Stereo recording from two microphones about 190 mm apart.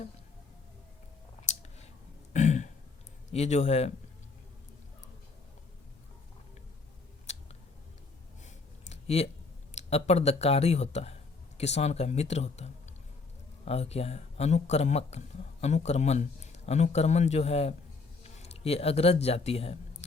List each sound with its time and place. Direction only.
2.3 s burping: 40° left (ahead or behind)
3.3 s speech: 35° left (ahead or behind)
7.3 s scissors: 35° left (ahead or behind)
8.4 s a sound: 35° left (ahead or behind)
9.7 s speech: 35° left (ahead or behind)